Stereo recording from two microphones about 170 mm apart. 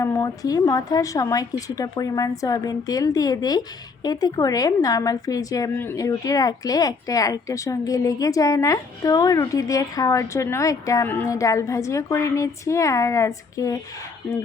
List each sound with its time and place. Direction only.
0.0 s a woman's voice: 15° left (ahead or behind)